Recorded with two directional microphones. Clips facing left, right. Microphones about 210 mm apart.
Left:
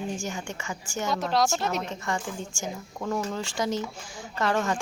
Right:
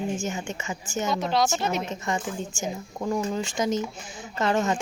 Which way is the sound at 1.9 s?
20° right (ahead or behind).